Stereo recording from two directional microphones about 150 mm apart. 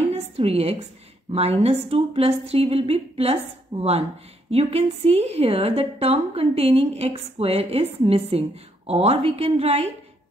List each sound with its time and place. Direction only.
0.5 s a woman's voice: 45° right (ahead or behind)